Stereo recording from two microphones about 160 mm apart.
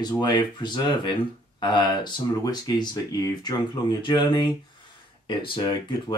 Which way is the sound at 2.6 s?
25° left (ahead or behind).